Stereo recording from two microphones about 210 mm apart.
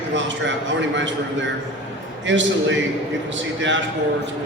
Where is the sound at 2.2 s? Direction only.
60° right (ahead or behind).